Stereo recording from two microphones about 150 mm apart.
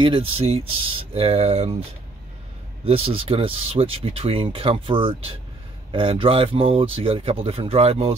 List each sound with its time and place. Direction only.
0.0 s speech: 35° right (ahead or behind)
2.8 s speech: 40° right (ahead or behind)